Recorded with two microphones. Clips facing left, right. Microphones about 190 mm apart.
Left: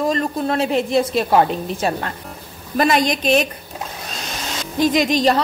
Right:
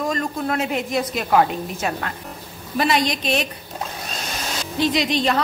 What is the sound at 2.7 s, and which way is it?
Speech, 50° left (ahead or behind).